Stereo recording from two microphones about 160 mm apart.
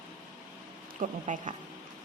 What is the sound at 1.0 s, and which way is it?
Speech, 50° right (ahead or behind).